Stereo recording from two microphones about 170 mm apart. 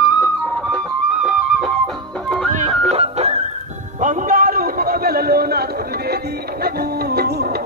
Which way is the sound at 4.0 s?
50° right (ahead or behind).